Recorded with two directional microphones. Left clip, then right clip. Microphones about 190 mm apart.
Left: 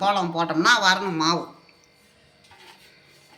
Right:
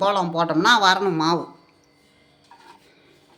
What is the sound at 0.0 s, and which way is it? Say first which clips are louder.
Speech: right 2 dB; 65° right (ahead or behind).